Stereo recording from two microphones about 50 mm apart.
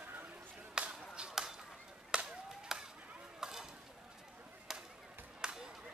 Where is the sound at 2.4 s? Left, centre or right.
Centre.